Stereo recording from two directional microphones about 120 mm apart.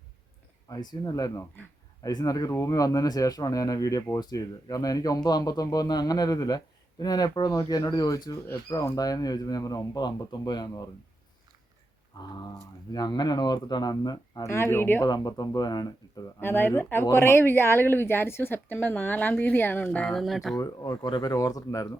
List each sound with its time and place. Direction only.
0.7 s speech: 35° left (ahead or behind)
12.1 s speech: 35° left (ahead or behind)
14.5 s speech: 20° left (ahead or behind)
15.0 s speech: 35° left (ahead or behind)
16.4 s speech: 20° left (ahead or behind); by 20.6 s centre (ahead or behind)
20.6 s speech: 30° left (ahead or behind)